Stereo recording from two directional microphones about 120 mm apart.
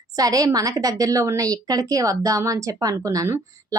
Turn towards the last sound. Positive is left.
turn(degrees=-25)  # may be behind; listen again after turning